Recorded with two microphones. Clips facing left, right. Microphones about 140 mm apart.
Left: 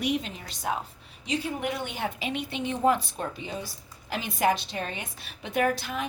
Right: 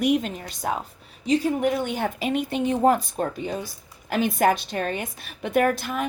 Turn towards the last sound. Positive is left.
turn(degrees=-50)  # may be behind; listen again after turning